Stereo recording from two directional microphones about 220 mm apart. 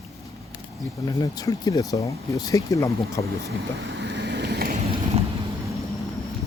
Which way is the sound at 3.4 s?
50° right (ahead or behind).